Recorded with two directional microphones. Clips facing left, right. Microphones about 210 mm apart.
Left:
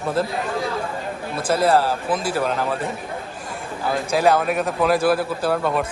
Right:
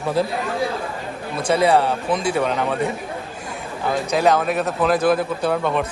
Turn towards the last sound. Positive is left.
turn(degrees=5)  # may be behind; listen again after turning